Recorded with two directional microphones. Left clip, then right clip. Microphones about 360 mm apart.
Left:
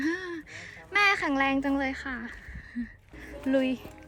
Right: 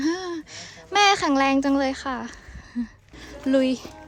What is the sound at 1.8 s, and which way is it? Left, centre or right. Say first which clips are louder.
Music: right 6 dB; centre.